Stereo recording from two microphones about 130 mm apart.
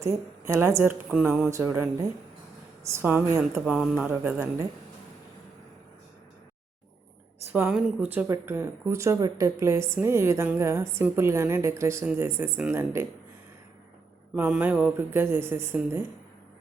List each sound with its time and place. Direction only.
0.0 s a woman's voice: 20° right (ahead or behind)
3.8 s speech: 5° right (ahead or behind)
7.5 s a woman's voice: 10° right (ahead or behind)
14.3 s speech: 15° right (ahead or behind)